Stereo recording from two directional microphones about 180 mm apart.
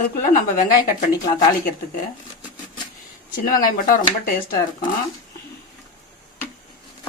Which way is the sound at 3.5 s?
50° left (ahead or behind).